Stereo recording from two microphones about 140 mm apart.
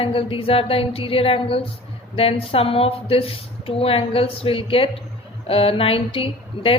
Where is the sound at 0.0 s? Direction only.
40° left (ahead or behind).